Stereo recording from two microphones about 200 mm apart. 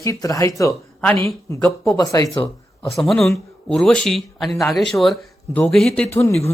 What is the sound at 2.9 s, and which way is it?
Speech, centre (ahead or behind).